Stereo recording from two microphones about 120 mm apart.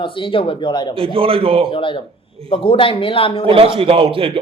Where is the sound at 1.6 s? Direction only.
45° left (ahead or behind).